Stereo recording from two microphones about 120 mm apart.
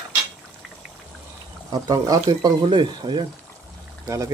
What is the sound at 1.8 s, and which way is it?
Speech, 30° right (ahead or behind).